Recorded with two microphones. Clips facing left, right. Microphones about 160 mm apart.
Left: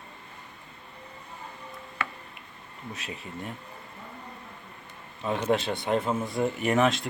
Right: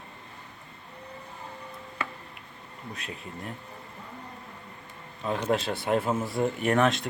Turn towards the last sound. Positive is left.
turn(degrees=0)  # may be behind; listen again after turning